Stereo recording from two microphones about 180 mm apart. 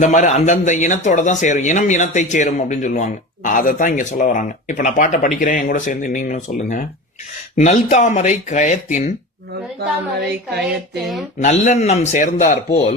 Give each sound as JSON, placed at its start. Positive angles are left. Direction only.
{"t": 0.0, "sound": "speech", "side_deg": 45}
{"t": 11.3, "sound": "a man's voice", "side_deg": 40}